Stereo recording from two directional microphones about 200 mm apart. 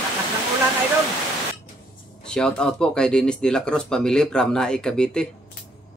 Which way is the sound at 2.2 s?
5° left (ahead or behind).